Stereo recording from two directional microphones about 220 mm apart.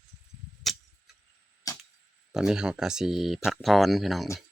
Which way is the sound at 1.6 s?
15° left (ahead or behind).